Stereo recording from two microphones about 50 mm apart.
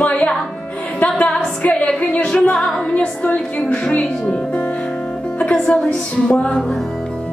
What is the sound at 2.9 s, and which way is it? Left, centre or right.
Music, left.